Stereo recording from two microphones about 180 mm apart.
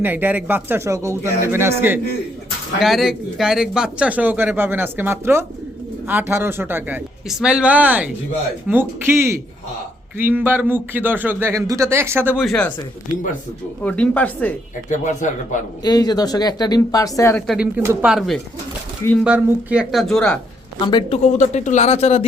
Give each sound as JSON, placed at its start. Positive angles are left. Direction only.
{"t": 0.0, "sound": "a man's voice", "side_deg": -10}
{"t": 2.8, "sound": "a man's voice", "side_deg": 0}
{"t": 12.5, "sound": "speech", "side_deg": 5}
{"t": 13.8, "sound": "speech", "side_deg": 5}
{"t": 14.8, "sound": "speech", "side_deg": 45}
{"t": 15.8, "sound": "speech", "side_deg": 20}
{"t": 17.4, "sound": "speech", "side_deg": 0}
{"t": 20.8, "sound": "speech", "side_deg": 25}
{"t": 21.3, "sound": "speech", "side_deg": 40}